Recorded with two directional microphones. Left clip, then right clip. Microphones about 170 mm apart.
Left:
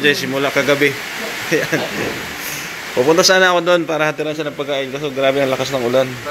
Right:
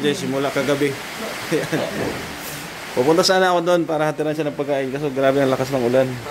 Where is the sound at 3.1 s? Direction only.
10° right (ahead or behind).